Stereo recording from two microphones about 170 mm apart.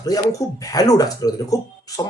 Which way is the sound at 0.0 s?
20° left (ahead or behind).